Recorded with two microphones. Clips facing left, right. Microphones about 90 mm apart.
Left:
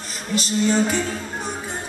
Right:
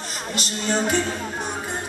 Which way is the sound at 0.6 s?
Centre (ahead or behind).